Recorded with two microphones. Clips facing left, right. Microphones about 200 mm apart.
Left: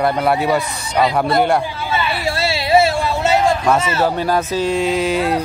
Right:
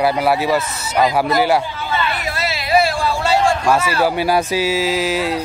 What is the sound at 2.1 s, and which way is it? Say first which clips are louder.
Hubbub: left 3 dB; 30° left (ahead or behind).